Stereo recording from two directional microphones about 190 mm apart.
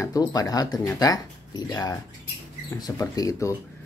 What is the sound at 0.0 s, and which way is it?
Speech, 20° left (ahead or behind).